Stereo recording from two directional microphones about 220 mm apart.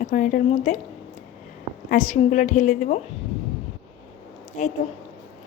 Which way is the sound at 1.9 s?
35° left (ahead or behind).